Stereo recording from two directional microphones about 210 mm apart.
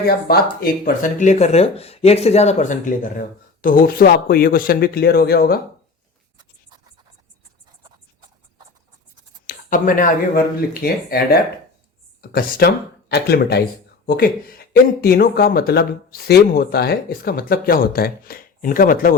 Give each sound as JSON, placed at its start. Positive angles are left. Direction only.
{"t": 0.3, "sound": "speech", "side_deg": 45}
{"t": 9.6, "sound": "speech", "side_deg": 40}